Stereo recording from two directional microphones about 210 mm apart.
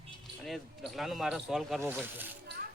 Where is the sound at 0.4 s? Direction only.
Centre (ahead or behind).